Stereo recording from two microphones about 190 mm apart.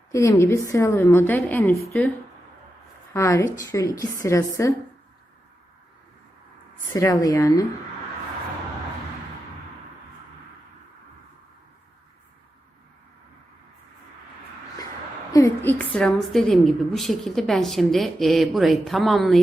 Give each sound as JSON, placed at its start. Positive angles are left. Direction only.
{"t": 0.1, "sound": "a woman's voice", "side_deg": 15}
{"t": 3.1, "sound": "a woman's voice", "side_deg": 15}
{"t": 6.9, "sound": "a woman's voice", "side_deg": 15}
{"t": 15.3, "sound": "a woman's voice", "side_deg": 15}